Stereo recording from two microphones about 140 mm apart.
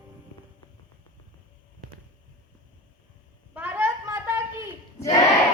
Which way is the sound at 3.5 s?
15° right (ahead or behind).